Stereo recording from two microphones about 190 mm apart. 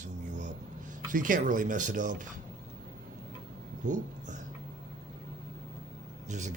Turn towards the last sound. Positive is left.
turn(degrees=-40)  # may be behind; listen again after turning